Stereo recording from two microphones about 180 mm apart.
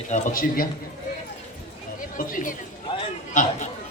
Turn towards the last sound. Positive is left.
turn(degrees=45)  # may be behind; listen again after turning